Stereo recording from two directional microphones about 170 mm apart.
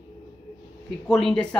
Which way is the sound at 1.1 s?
5° left (ahead or behind).